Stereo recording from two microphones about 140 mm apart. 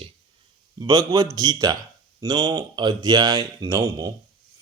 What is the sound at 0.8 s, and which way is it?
Speech, 30° right (ahead or behind).